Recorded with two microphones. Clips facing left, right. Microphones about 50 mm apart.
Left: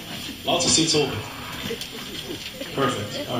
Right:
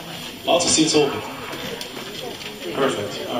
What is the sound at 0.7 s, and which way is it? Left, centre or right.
A man's voice, right.